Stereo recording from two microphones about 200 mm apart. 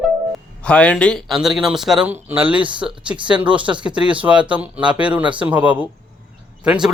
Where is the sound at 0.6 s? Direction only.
5° left (ahead or behind).